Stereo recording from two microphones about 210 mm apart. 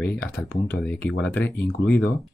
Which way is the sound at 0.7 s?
10° left (ahead or behind).